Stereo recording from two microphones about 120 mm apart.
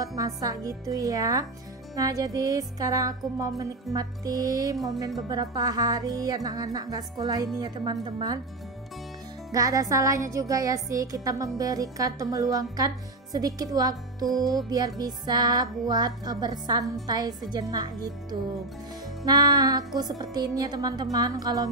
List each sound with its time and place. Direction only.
0.0 s music: 30° right (ahead or behind)
5.3 s speech: 30° right (ahead or behind)
9.5 s music: 30° right (ahead or behind)
14.7 s speech: 30° right (ahead or behind)
19.2 s speech: 30° right (ahead or behind)